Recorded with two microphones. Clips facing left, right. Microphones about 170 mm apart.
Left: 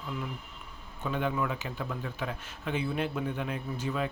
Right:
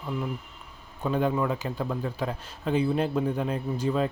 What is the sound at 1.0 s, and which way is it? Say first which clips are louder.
A man's voice: right 5 dB; 35° right (ahead or behind).